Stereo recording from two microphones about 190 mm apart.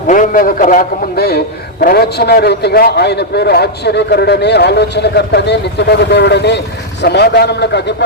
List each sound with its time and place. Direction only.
0.1 s a man's voice: 45° left (ahead or behind); by 7.9 s 65° left (ahead or behind)